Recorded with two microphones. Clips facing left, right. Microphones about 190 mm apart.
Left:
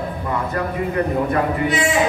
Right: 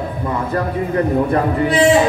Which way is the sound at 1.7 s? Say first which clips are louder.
Right 10 dB; 35° right (ahead or behind).